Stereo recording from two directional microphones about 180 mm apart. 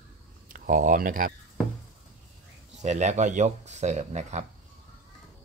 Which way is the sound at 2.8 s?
40° right (ahead or behind).